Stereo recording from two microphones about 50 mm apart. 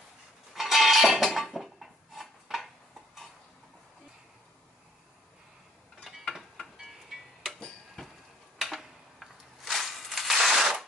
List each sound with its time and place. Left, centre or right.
0.6 s cutlery: centre
1.2 s dishes: centre
6.1 s tick-tock: centre
6.8 s music: centre
7.6 s tick-tock: centre
8.5 s crushing: centre